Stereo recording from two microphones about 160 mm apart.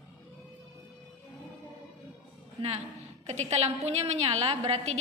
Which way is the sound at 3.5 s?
45° right (ahead or behind).